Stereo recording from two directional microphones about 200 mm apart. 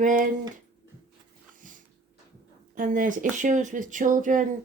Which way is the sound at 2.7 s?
40° right (ahead or behind).